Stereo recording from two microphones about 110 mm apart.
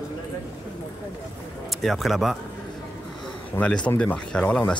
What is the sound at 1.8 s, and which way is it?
Speech, centre (ahead or behind).